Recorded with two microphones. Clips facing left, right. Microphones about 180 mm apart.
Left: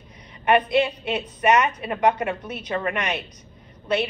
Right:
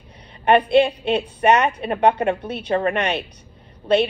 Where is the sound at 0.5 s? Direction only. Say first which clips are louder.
Right 4 dB; 30° right (ahead or behind).